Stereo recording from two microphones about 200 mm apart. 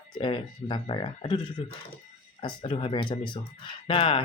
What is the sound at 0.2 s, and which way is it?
Speech, 25° left (ahead or behind).